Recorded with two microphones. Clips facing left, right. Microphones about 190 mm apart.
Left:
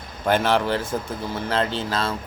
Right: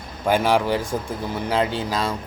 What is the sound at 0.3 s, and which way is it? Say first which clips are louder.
Speech: right 1 dB; 10° right (ahead or behind).